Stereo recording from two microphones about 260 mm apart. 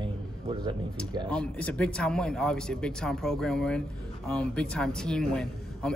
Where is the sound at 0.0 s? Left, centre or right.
Centre.